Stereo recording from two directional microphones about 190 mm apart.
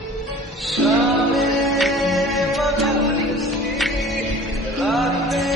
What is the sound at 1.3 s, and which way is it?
Music, centre (ahead or behind).